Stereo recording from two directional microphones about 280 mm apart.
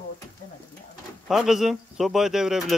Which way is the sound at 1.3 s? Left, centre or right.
Centre.